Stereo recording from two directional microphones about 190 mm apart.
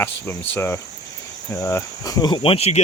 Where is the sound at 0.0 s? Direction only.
10° left (ahead or behind).